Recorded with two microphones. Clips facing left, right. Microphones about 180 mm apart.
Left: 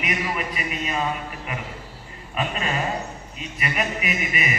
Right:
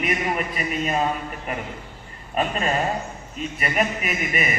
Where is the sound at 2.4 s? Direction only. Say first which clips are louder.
Right 3 dB; 45° right (ahead or behind).